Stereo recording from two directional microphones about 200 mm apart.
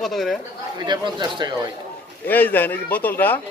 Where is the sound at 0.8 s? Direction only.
20° right (ahead or behind).